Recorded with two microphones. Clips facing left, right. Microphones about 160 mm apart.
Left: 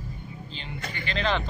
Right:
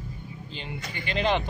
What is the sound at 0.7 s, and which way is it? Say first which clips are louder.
Speech: left 1 dB; 60° left (ahead or behind).